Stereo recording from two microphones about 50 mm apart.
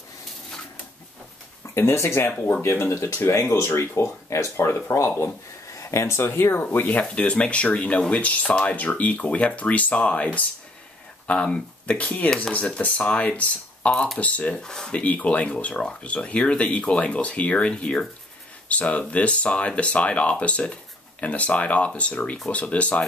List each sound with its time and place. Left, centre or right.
1.8 s speech: left
3.2 s speech: left
6.5 s speech: left
14.6 s speech: centre
14.9 s speech: left